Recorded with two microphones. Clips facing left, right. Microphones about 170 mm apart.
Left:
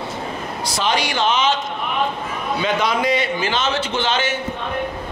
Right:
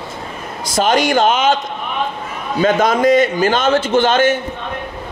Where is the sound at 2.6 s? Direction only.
45° right (ahead or behind).